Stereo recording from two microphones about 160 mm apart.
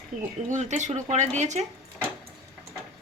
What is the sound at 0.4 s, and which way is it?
A woman's voice, 50° right (ahead or behind).